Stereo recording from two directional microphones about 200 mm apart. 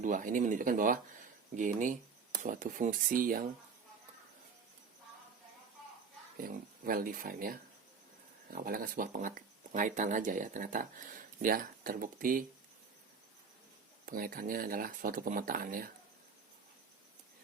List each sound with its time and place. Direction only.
0.0 s speech: 40° right (ahead or behind)
6.3 s speech: 45° right (ahead or behind)
14.0 s speech: 45° right (ahead or behind)